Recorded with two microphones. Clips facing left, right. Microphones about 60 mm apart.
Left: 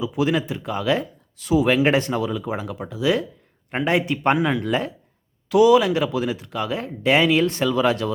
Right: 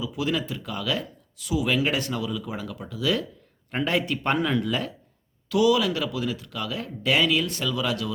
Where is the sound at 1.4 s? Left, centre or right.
Left.